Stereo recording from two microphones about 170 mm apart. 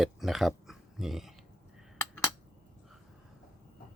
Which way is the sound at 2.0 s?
10° left (ahead or behind).